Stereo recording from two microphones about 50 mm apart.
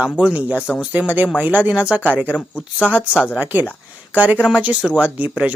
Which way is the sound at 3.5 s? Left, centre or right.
Right.